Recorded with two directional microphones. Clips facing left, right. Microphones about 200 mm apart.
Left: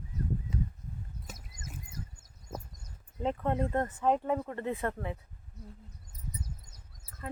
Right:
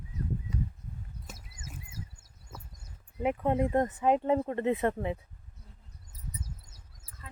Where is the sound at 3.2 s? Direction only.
10° right (ahead or behind).